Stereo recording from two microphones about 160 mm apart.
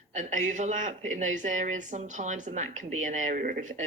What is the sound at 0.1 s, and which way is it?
A woman's voice, 50° right (ahead or behind).